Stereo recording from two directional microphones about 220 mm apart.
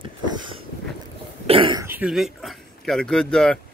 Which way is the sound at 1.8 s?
5° right (ahead or behind).